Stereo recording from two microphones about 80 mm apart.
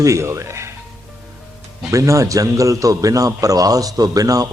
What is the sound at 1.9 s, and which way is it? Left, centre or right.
A man's voice, right.